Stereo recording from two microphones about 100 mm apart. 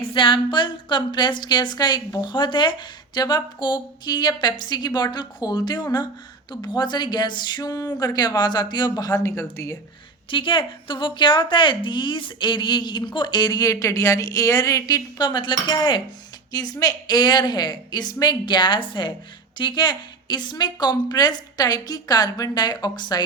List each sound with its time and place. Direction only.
0.0 s speech: 60° left (ahead or behind); by 9.7 s 30° left (ahead or behind)
10.2 s speech: 55° left (ahead or behind)
16.5 s speech: 40° left (ahead or behind)